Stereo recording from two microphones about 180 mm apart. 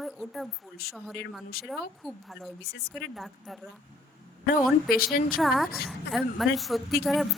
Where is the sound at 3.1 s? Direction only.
Centre (ahead or behind).